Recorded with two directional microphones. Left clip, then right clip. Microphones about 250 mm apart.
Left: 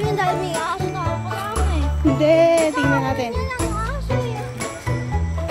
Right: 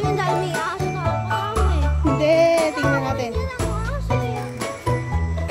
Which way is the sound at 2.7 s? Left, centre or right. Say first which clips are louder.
Left 1 dB; right.